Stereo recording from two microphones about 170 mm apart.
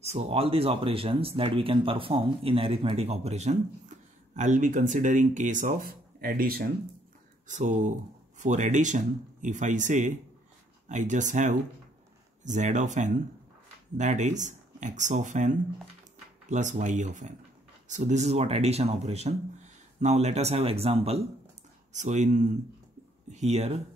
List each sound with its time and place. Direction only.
0.0 s speech: 40° right (ahead or behind); by 6.7 s 60° right (ahead or behind)
7.4 s speech: 45° right (ahead or behind)